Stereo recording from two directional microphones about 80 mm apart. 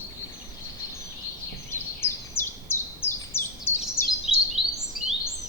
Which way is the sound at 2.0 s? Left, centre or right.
Left.